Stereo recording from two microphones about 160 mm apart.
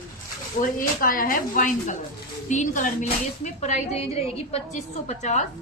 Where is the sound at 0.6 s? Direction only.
60° left (ahead or behind).